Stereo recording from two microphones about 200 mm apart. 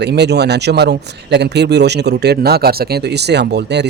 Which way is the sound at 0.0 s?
55° right (ahead or behind).